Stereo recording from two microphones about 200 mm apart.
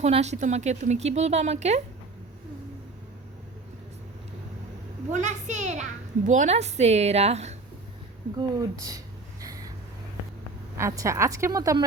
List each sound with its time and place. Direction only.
0.0 s speech: 35° right (ahead or behind)
5.1 s speech: 35° right (ahead or behind)
8.4 s a woman's voice: 20° right (ahead or behind)
9.4 s vehicle: 15° right (ahead or behind)
10.8 s a woman's voice: 15° right (ahead or behind)